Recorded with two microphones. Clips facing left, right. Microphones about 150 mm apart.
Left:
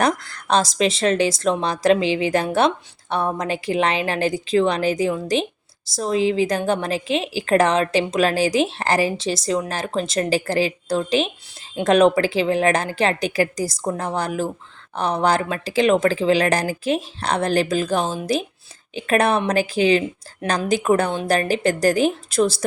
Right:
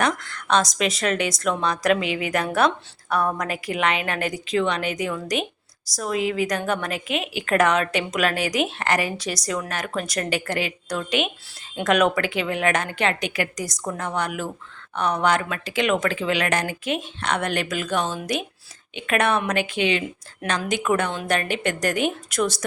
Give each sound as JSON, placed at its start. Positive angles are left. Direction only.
{"t": 0.0, "sound": "a woman's voice", "side_deg": 35}